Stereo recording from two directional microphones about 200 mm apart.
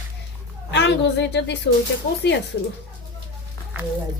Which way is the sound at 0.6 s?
60° left (ahead or behind).